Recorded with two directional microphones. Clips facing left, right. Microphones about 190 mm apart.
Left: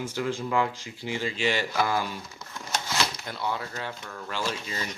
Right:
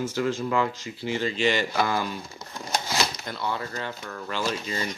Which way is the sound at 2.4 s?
35° right (ahead or behind).